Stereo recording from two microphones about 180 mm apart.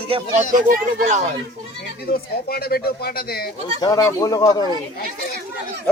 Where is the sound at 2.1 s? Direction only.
60° left (ahead or behind).